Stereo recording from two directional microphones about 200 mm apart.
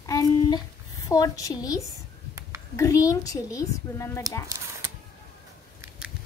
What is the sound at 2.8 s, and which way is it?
A woman's voice, 15° left (ahead or behind).